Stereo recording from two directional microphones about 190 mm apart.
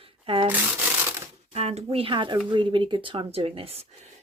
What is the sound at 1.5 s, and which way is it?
Speech, 35° right (ahead or behind).